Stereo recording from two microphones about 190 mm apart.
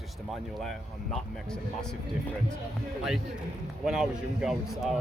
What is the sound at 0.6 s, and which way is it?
Speech, 5° left (ahead or behind).